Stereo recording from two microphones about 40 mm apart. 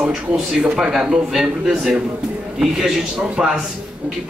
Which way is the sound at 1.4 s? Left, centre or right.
Centre.